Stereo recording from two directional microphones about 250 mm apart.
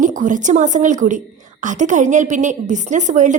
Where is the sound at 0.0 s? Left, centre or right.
Right.